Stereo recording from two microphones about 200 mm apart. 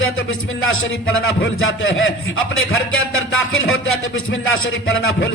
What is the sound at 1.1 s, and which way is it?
Speech, 85° left.